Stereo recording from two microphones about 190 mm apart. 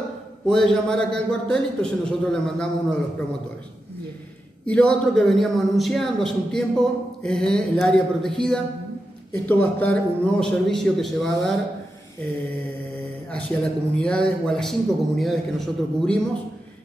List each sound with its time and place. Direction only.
0.5 s a man's voice: 5° left (ahead or behind)
4.6 s a man's voice: 5° left (ahead or behind)
13.3 s a man's voice: 5° left (ahead or behind)